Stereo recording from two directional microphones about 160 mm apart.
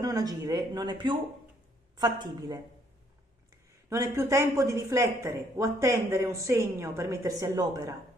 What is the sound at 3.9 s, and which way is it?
A woman's voice, 20° right (ahead or behind).